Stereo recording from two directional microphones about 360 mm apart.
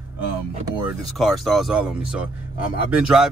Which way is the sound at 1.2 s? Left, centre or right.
Centre.